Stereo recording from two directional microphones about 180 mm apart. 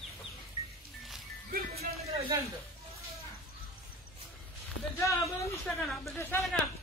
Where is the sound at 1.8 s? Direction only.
35° right (ahead or behind).